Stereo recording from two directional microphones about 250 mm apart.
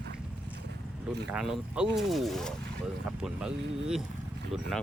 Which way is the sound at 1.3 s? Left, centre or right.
Centre.